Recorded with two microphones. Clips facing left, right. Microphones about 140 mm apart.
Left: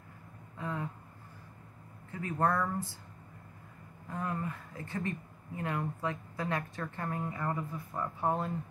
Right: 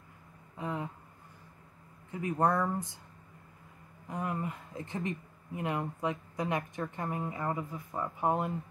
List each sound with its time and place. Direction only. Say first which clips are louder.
0.6 s a sound: right 2 dB; 20° right (ahead or behind)
2.0 s speech: right 2 dB; 15° right (ahead or behind)
4.1 s speech: right 1 dB; 15° right (ahead or behind)